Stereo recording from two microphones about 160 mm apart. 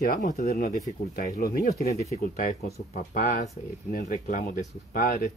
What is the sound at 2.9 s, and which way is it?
Speech, 55° left (ahead or behind).